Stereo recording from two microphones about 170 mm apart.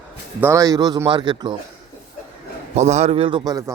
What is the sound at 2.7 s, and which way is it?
Speech, 40° right (ahead or behind).